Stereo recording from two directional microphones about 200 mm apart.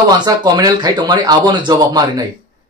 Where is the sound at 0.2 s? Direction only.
20° right (ahead or behind).